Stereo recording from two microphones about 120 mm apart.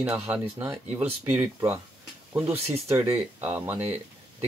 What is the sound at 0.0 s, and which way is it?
Speech, 15° right (ahead or behind).